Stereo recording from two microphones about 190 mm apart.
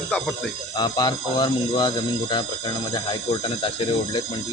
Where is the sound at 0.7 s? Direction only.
25° left (ahead or behind).